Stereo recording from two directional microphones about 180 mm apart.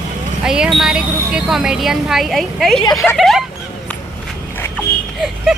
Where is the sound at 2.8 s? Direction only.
20° left (ahead or behind).